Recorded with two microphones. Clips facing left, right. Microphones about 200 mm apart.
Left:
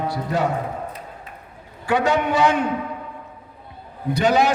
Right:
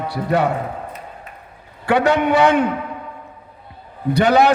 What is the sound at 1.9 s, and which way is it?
Speech, 60° right (ahead or behind).